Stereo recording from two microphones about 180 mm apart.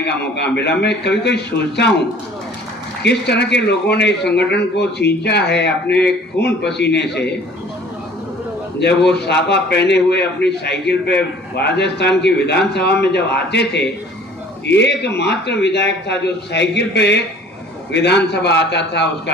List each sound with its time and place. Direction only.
0.0 s speech: 70° left (ahead or behind)
9.1 s speech: 70° left (ahead or behind)
14.7 s speech: 75° left (ahead or behind)